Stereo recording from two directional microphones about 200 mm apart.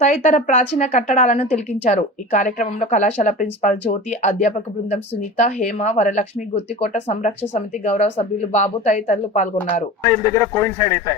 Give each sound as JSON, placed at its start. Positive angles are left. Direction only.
{"t": 0.0, "sound": "speech", "side_deg": 40}
{"t": 10.0, "sound": "speech", "side_deg": 10}